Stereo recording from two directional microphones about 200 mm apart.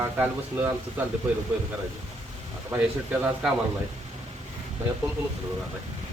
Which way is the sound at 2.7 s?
5° right (ahead or behind).